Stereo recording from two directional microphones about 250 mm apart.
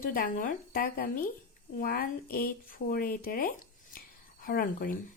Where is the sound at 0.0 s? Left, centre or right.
Left.